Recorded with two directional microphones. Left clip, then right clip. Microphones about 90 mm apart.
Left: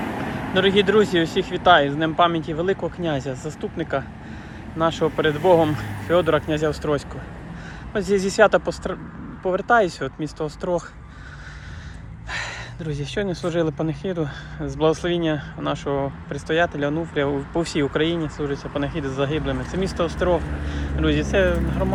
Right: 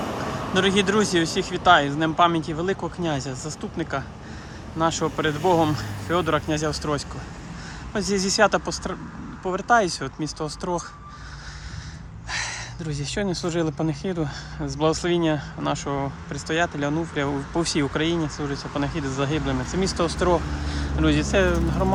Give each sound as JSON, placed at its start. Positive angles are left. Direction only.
{"t": 0.2, "sound": "speech", "side_deg": -30}
{"t": 12.3, "sound": "speech", "side_deg": -30}
{"t": 19.5, "sound": "speech", "side_deg": -40}
{"t": 20.0, "sound": "speech", "side_deg": -55}